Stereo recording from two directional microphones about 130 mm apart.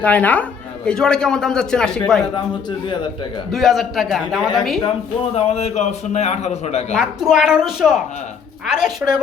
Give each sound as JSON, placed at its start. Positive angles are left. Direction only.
{"t": 0.0, "sound": "a woman's voice", "side_deg": 10}
{"t": 3.5, "sound": "a man's voice", "side_deg": 0}
{"t": 5.3, "sound": "a man's voice", "side_deg": 55}
{"t": 6.9, "sound": "a man's voice", "side_deg": -5}